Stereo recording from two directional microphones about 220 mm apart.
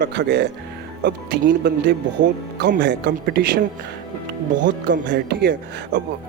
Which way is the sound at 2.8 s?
50° right (ahead or behind).